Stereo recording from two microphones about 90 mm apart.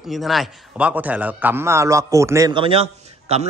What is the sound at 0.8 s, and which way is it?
Speech, 15° right (ahead or behind).